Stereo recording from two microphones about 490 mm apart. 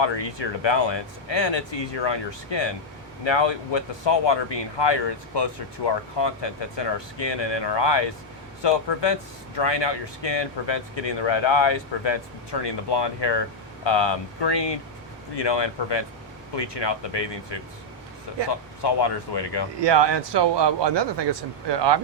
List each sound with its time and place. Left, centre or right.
0.0 s speech: left
19.8 s a man's voice: right